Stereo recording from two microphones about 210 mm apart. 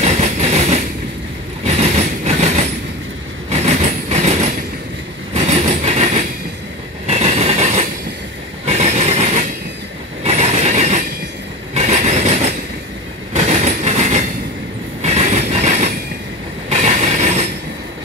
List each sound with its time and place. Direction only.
0.0 s train: 30° right (ahead or behind)
5.9 s train: 30° right (ahead or behind)
8.6 s vehicle: 30° right (ahead or behind)
10.2 s mechanisms: 30° right (ahead or behind)
11.7 s train: 35° right (ahead or behind)
13.4 s train: 30° right (ahead or behind)
16.6 s a sound: 35° right (ahead or behind)